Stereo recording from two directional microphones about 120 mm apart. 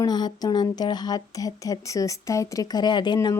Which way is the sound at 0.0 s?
35° left (ahead or behind).